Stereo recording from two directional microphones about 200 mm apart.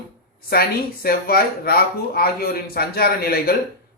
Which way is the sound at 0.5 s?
50° left (ahead or behind).